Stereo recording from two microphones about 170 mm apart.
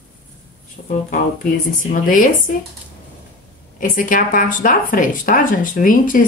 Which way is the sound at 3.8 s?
55° left (ahead or behind).